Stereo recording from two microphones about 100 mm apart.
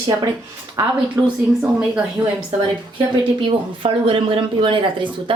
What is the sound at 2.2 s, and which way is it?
Speech, 30° right (ahead or behind).